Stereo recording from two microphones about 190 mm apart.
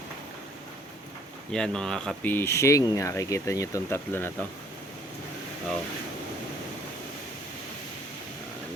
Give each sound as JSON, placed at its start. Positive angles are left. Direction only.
{"t": 1.5, "sound": "speech", "side_deg": 5}